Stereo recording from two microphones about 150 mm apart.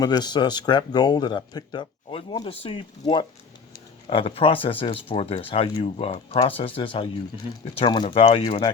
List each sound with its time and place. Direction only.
0.0 s speech: 25° left (ahead or behind)